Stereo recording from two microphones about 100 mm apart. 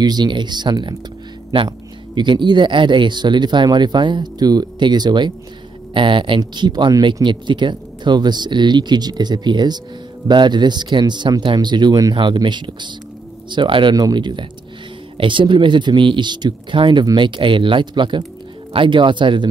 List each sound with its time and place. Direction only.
0.0 s speech: 45° right (ahead or behind)